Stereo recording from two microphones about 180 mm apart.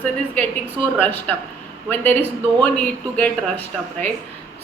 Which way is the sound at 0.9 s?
10° left (ahead or behind).